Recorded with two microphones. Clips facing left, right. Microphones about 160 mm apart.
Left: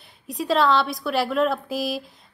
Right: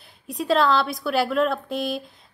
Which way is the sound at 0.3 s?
Centre (ahead or behind).